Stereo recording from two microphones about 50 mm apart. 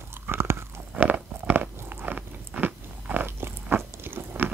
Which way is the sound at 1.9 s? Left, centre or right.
Right.